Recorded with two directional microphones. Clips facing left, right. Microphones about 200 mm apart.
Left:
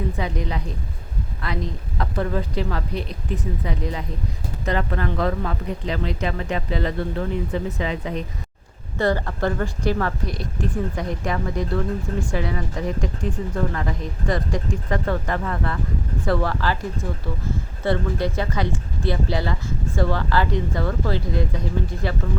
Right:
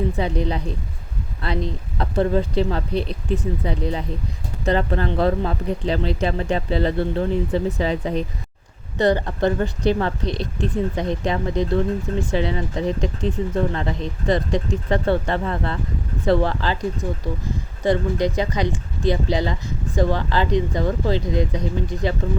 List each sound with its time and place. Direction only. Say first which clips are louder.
0.2 s speech: right 4 dB; 30° right (ahead or behind)
1.4 s a sound: right 4 dB; 30° right (ahead or behind)
2.0 s speech: right 5 dB; 30° right (ahead or behind)
9.0 s speech: right 3 dB; 20° right (ahead or behind)